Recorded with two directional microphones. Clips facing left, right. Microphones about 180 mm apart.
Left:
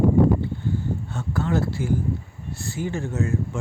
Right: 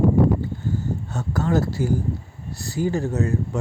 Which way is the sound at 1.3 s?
40° right (ahead or behind).